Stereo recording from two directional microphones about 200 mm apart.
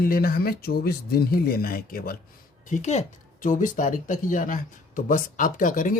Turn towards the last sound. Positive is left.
turn(degrees=40)  # may be behind; listen again after turning